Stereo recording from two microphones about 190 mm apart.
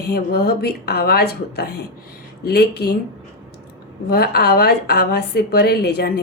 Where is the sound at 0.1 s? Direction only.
55° left (ahead or behind).